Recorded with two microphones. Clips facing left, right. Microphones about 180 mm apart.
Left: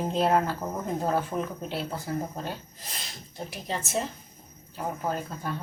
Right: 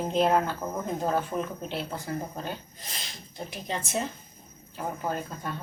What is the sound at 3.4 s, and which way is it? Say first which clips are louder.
A woman's voice: even; 5° left (ahead or behind).